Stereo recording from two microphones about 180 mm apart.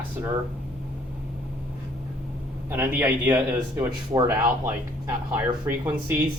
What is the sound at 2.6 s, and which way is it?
Speech, 10° right (ahead or behind).